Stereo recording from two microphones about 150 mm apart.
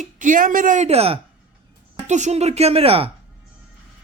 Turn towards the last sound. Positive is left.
turn(degrees=-40)  # may be behind; listen again after turning